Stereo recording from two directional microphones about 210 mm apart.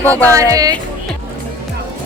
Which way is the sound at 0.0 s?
10° left (ahead or behind).